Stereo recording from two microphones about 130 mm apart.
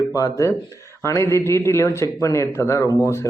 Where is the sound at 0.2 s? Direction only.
25° left (ahead or behind).